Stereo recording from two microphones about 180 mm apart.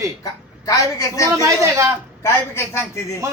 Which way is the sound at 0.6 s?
20° left (ahead or behind).